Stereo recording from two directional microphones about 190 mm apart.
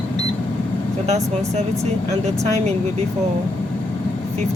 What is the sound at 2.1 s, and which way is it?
Speech, 35° right (ahead or behind).